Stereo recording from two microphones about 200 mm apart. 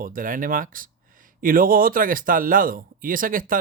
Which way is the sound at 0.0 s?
45° right (ahead or behind).